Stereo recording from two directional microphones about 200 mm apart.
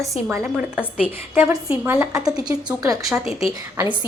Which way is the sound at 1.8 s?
10° right (ahead or behind).